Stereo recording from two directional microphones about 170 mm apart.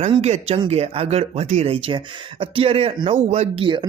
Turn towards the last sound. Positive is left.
turn(degrees=-30)  # may be behind; listen again after turning